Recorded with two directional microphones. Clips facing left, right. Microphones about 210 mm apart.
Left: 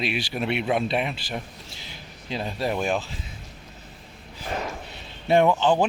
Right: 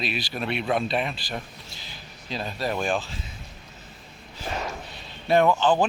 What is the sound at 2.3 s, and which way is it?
Speech, 20° left (ahead or behind).